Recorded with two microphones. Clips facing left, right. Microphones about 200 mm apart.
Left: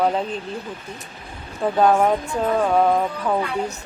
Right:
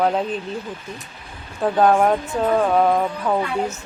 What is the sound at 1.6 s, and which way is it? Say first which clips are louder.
A woman's voice: right 1 dB; 5° right (ahead or behind).